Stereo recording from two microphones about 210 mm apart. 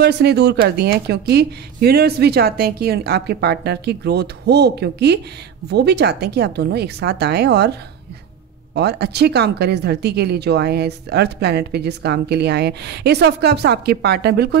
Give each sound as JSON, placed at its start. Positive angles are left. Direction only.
{"t": 0.0, "sound": "speech", "side_deg": -50}
{"t": 8.7, "sound": "speech", "side_deg": -50}